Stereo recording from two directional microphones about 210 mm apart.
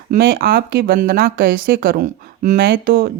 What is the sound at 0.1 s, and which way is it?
Speech, 45° right (ahead or behind).